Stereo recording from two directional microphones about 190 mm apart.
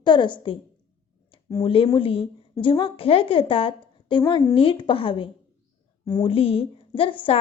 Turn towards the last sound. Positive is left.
turn(degrees=25)  # may be behind; listen again after turning